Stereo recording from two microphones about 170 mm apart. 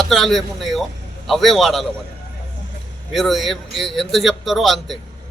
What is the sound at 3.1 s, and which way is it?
Speech, centre (ahead or behind).